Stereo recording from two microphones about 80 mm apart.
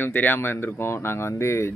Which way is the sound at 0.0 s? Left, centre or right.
Left.